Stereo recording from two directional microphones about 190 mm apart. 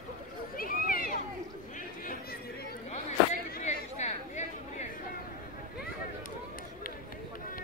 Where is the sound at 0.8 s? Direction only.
50° left (ahead or behind).